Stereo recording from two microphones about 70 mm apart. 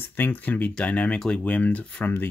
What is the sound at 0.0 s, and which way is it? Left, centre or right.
Speech, left.